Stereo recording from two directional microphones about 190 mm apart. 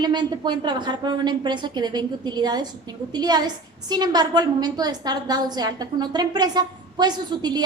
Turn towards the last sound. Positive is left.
turn(degrees=-20)  # may be behind; listen again after turning